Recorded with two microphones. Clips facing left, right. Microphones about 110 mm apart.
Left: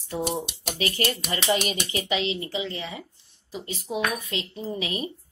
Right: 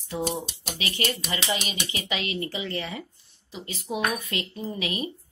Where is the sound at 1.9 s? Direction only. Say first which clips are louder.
Left 4 dB; 30° left (ahead or behind); by 3.0 s 15° left (ahead or behind).